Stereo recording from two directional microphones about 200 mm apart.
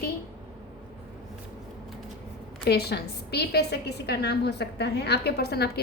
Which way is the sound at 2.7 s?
55° left (ahead or behind).